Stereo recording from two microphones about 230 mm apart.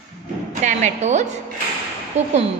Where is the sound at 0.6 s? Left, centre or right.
Right.